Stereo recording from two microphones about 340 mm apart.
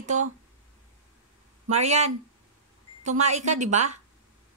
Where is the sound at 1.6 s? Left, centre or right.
Centre.